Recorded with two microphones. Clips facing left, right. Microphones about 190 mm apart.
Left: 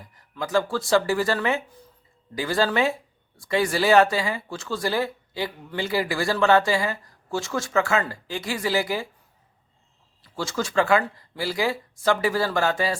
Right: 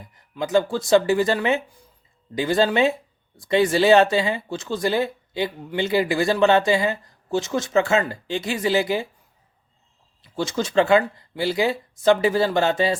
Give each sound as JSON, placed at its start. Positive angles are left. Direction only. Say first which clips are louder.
{"t": 0.0, "sound": "speech", "louder": "right 4 dB", "side_deg": -20}
{"t": 10.2, "sound": "speech", "louder": "right 3 dB", "side_deg": -20}